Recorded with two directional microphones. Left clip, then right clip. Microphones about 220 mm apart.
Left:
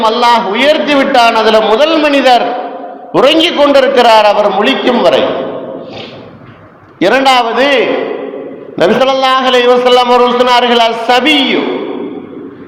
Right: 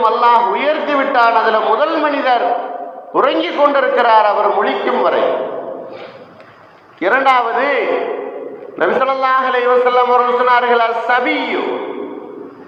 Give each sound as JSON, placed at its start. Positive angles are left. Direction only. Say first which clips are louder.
{"t": 0.0, "sound": "a man's voice", "louder": "left 3 dB", "side_deg": 55}
{"t": 7.0, "sound": "a man's voice", "louder": "left 5 dB", "side_deg": 60}
{"t": 8.8, "sound": "a man's voice", "louder": "left 6 dB", "side_deg": 60}